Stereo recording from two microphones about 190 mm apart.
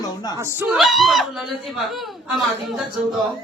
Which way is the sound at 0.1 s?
20° left (ahead or behind).